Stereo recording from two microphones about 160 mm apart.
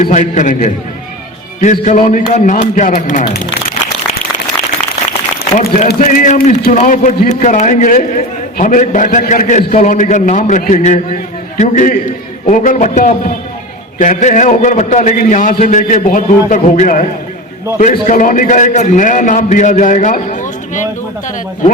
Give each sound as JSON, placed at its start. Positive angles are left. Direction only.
{"t": 0.0, "sound": "a man's voice", "side_deg": 50}
{"t": 1.7, "sound": "a man's voice", "side_deg": 50}
{"t": 6.1, "sound": "a man's voice", "side_deg": 55}